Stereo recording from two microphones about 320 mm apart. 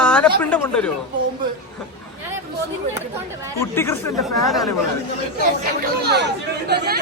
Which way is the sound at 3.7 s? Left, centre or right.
Centre.